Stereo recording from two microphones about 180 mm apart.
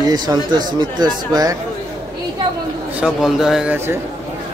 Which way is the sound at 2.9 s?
Centre (ahead or behind).